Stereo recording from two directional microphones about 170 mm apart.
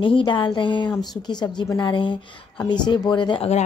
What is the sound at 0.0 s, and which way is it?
Speech, 30° left (ahead or behind).